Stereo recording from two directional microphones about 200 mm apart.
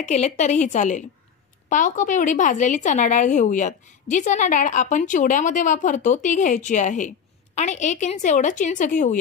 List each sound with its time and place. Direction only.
0.0 s a woman's voice: 35° left (ahead or behind)